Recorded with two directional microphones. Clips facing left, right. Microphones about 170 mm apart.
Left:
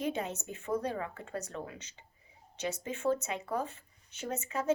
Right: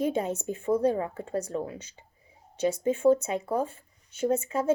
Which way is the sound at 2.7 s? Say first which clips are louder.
Right 10 dB; 10° right (ahead or behind).